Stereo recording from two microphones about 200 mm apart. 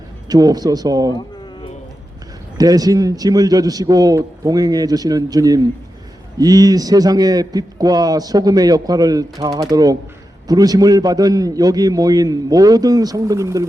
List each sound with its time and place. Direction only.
0.3 s a man's voice: 20° right (ahead or behind)
2.6 s a man's voice: 20° right (ahead or behind)